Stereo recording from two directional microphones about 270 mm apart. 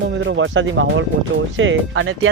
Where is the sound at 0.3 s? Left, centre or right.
Right.